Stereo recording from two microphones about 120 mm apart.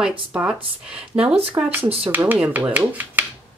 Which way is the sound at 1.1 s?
55° right (ahead or behind).